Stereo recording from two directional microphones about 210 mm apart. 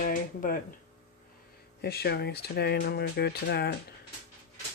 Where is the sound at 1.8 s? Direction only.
50° left (ahead or behind).